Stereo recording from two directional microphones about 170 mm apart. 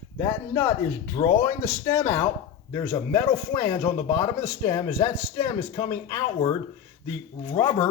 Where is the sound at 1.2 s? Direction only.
20° left (ahead or behind).